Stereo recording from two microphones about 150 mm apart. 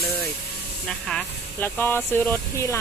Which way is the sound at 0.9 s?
5° left (ahead or behind).